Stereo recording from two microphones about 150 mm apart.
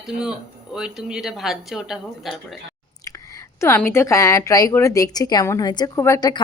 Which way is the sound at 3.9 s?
20° left (ahead or behind).